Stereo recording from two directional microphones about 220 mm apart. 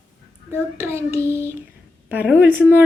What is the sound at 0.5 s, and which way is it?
A woman's voice, 10° right (ahead or behind).